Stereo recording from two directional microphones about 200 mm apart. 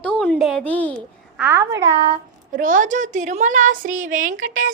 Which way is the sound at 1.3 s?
10° right (ahead or behind).